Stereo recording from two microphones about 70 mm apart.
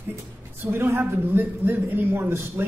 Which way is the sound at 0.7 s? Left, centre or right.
Right.